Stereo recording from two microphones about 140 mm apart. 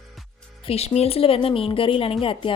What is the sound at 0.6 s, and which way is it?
A woman's voice, 45° left (ahead or behind).